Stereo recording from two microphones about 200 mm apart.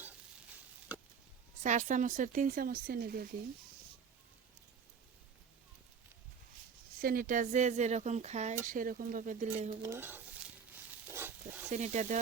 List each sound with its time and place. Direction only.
1.6 s speech: 40° right (ahead or behind)
7.0 s speech: 45° right (ahead or behind)
9.8 s speech: 10° right (ahead or behind)
10.7 s a sound: 10° right (ahead or behind)
11.7 s speech: 35° right (ahead or behind)